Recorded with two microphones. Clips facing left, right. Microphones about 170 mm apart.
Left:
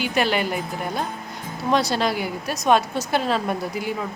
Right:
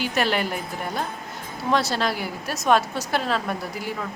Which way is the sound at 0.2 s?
10° left (ahead or behind).